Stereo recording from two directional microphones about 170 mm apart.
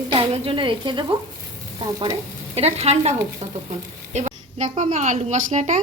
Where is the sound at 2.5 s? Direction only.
40° right (ahead or behind).